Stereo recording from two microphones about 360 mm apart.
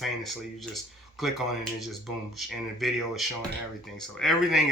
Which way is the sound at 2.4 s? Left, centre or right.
Centre.